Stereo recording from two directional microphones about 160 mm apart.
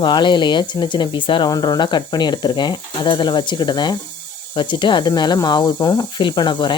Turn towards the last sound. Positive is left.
turn(degrees=30)  # may be behind; listen again after turning